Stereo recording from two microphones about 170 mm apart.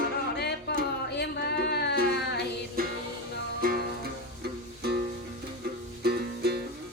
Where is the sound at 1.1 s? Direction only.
85° left.